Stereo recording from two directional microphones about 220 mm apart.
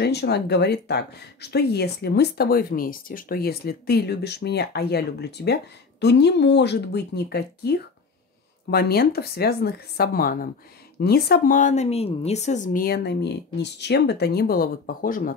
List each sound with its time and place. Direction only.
0.0 s a woman's voice: 50° left (ahead or behind)